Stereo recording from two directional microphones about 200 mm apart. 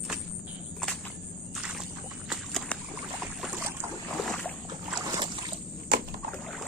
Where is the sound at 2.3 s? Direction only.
Centre (ahead or behind).